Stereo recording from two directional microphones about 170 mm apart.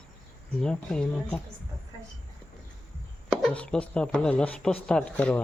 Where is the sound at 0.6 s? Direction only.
5° left (ahead or behind).